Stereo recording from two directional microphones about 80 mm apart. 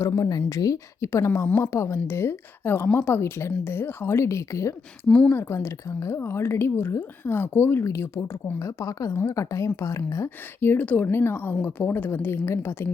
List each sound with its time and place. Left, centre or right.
0.0 s a woman's voice: left
5.0 s speech: centre
5.3 s speech: left
10.2 s a woman's voice: left